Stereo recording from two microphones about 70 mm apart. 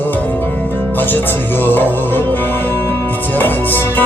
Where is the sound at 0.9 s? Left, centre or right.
Left.